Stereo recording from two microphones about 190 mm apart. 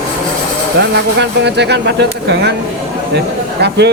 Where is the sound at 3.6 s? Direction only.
60° right (ahead or behind).